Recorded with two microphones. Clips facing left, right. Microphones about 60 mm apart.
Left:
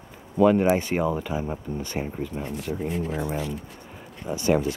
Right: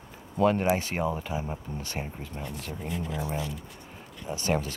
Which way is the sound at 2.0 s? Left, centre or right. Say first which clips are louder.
Left 8 dB; centre.